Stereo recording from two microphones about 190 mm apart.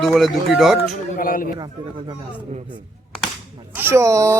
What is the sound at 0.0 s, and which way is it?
Speech, centre (ahead or behind).